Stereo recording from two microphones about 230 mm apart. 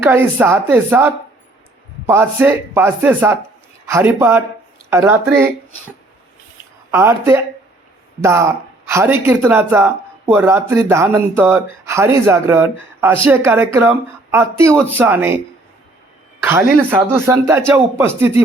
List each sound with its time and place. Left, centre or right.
0.0 s speech: centre
6.9 s speech: centre
16.4 s speech: centre